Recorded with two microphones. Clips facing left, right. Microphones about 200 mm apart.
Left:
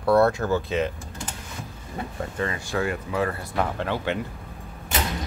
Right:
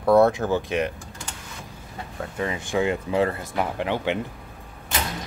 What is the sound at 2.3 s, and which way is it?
Speech, 15° right (ahead or behind).